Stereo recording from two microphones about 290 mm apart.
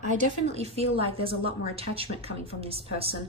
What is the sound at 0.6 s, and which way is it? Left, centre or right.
A woman's voice, right.